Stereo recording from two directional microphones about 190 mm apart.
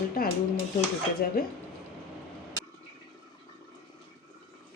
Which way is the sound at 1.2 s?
55° left (ahead or behind).